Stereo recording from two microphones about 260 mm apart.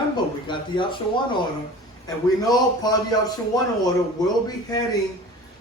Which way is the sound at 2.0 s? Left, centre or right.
Centre.